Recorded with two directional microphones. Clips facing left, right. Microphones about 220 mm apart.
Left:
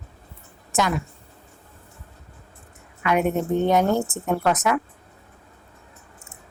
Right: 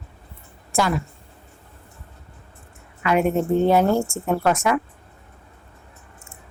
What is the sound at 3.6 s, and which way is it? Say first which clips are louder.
A woman's voice: right 1 dB; 5° right (ahead or behind).